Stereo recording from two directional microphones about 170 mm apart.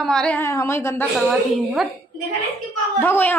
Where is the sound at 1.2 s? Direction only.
Centre (ahead or behind).